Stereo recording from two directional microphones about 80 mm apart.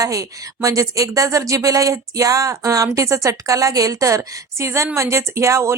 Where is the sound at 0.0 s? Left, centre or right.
Right.